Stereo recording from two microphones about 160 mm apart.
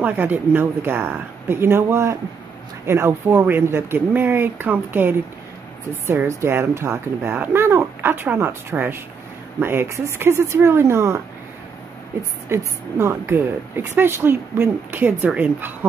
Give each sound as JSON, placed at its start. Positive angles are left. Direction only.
{"t": 0.0, "sound": "speech", "side_deg": -10}
{"t": 12.5, "sound": "speech", "side_deg": -15}